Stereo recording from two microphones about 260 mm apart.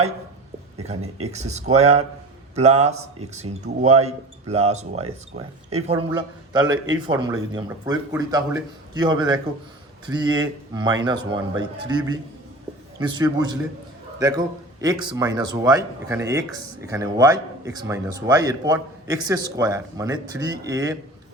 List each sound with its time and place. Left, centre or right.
1.2 s speech: right